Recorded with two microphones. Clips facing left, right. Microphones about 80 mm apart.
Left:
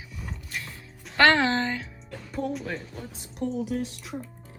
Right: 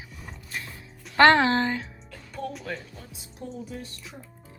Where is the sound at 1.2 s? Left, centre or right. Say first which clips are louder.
Right 3 dB; right.